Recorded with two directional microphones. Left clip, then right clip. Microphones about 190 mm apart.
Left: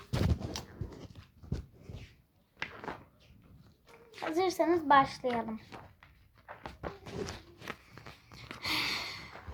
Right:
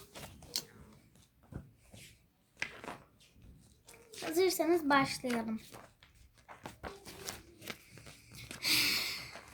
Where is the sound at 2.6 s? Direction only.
20° left (ahead or behind).